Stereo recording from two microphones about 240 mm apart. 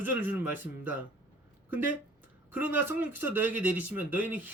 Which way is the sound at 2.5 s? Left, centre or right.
Centre.